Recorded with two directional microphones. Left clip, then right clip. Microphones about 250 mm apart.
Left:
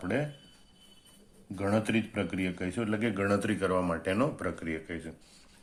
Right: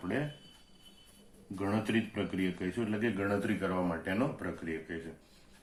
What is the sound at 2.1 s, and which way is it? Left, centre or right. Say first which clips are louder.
Speech: left 2 dB; left.